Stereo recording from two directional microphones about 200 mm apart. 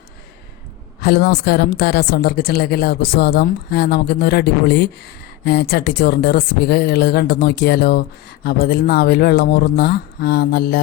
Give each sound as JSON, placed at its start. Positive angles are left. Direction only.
{"t": 1.0, "sound": "speech", "side_deg": 50}